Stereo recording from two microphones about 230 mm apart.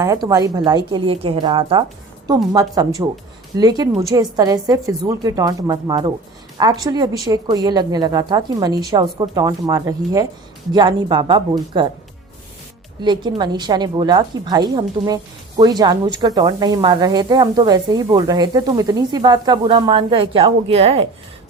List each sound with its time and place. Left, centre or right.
0.0 s a woman's voice: centre
13.0 s a woman's voice: centre